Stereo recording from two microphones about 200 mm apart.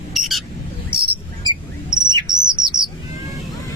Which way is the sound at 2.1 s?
20° right (ahead or behind).